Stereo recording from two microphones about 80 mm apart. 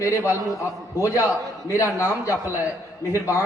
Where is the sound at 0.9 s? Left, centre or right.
Left.